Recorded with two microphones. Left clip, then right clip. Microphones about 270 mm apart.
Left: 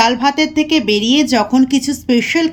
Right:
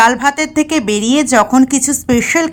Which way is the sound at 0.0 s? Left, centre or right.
Centre.